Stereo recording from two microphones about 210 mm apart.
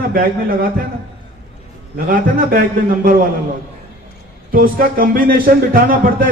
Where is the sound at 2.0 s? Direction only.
45° right (ahead or behind).